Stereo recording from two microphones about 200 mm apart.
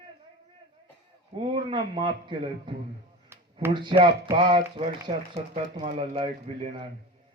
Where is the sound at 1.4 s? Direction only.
25° right (ahead or behind).